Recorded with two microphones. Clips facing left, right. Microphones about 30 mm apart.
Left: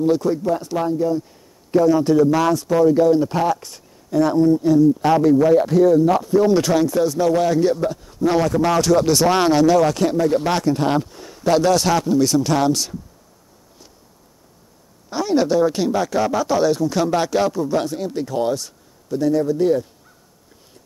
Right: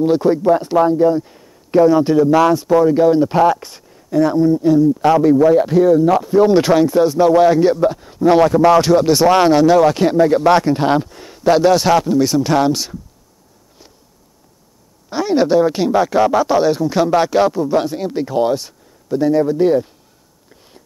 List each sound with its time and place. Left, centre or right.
0.0 s a man's voice: right
4.2 s speech: centre
6.4 s speech: right
11.1 s a sound: right
11.4 s speech: right
15.0 s speech: right